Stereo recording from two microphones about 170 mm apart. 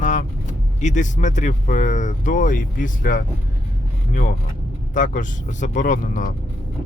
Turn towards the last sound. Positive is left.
turn(degrees=50)  # may be behind; listen again after turning